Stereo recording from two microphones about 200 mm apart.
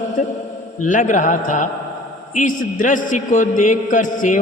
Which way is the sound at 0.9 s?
40° left (ahead or behind).